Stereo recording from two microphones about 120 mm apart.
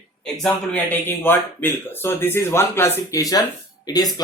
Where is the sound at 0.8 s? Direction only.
15° left (ahead or behind).